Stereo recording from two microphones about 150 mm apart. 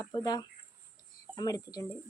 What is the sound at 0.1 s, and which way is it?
Speech, 25° left (ahead or behind).